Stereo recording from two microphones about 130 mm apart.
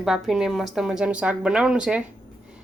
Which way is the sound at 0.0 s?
5° right (ahead or behind).